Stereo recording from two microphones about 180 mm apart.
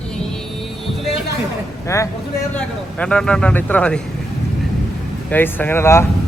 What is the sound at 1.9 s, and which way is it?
Speech, 15° left (ahead or behind).